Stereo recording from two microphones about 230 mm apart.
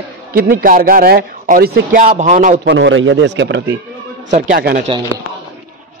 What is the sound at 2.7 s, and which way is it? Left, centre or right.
Speech, right.